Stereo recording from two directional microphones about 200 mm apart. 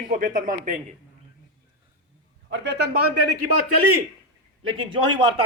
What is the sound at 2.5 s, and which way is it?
Speech, 60° right (ahead or behind).